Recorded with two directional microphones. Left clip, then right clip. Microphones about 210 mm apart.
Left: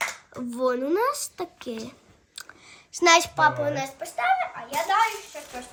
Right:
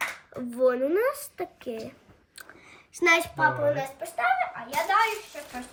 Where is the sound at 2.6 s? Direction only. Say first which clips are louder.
Left 3 dB; 5° left (ahead or behind).